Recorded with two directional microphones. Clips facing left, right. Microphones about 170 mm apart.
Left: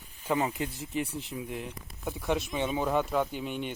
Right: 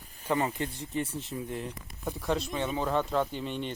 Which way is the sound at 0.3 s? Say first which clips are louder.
Even; 10° left (ahead or behind).